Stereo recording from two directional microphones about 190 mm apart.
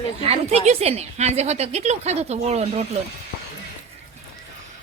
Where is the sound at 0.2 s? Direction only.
35° right (ahead or behind).